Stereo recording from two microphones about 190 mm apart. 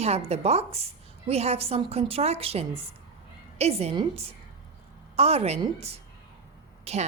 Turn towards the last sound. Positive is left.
turn(degrees=-35)  # may be behind; listen again after turning